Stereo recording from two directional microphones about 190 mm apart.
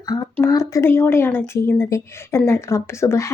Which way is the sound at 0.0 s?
20° left (ahead or behind).